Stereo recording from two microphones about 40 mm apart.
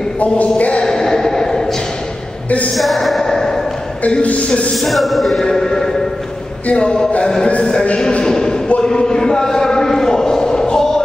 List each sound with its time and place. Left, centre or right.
0.2 s a man's voice: left
0.8 s a sound: centre
2.7 s music: centre
3.2 s a sound: centre
4.1 s a man's voice: left
4.7 s music: centre
5.4 s a man's voice: centre
6.7 s a man's voice: left
8.1 s a man's voice: centre
8.8 s a sound: centre